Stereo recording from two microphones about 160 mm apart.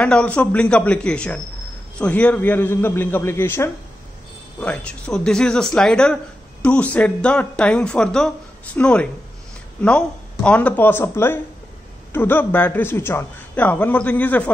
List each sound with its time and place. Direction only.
0.0 s speech: 10° left (ahead or behind)